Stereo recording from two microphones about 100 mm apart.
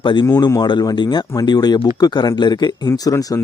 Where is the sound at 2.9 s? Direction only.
35° left (ahead or behind).